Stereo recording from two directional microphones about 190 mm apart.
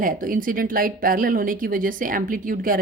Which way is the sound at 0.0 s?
45° right (ahead or behind).